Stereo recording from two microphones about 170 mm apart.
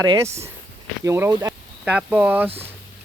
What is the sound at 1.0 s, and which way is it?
Speech, 15° right (ahead or behind).